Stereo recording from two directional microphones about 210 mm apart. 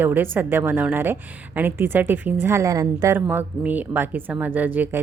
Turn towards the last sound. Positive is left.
turn(degrees=-10)  # may be behind; listen again after turning